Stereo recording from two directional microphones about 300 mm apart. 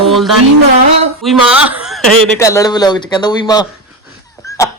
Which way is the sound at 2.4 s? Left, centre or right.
Centre.